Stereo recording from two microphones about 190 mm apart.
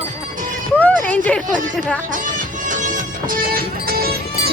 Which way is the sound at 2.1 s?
45° right (ahead or behind).